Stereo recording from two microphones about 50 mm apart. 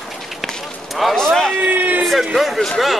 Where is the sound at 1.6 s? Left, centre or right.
Right.